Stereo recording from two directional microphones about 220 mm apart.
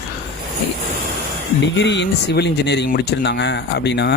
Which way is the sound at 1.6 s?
55° left (ahead or behind).